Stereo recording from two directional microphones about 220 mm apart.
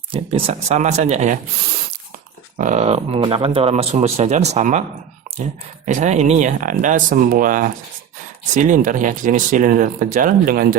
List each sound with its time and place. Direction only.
0.1 s speech: 25° right (ahead or behind)
2.6 s speech: 35° right (ahead or behind)